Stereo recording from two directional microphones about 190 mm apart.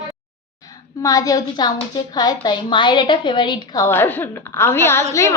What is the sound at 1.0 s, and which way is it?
A woman's voice, 20° left (ahead or behind).